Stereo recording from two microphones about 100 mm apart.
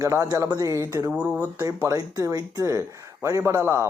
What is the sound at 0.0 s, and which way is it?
Speech, 30° right (ahead or behind).